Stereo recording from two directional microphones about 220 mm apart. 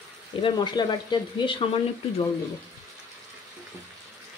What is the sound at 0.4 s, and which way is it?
Speech, 20° left (ahead or behind).